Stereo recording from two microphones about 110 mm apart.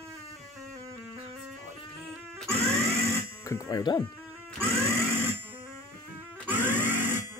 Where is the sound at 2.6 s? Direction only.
25° right (ahead or behind).